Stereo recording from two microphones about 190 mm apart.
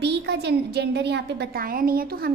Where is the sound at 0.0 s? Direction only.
60° right (ahead or behind).